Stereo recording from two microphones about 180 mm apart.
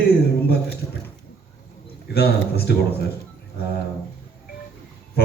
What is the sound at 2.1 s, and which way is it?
Speech, 60° left (ahead or behind).